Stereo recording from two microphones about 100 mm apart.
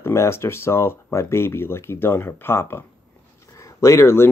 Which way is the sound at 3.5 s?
30° left (ahead or behind).